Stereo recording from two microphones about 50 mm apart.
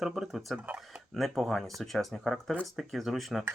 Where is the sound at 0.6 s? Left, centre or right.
Right.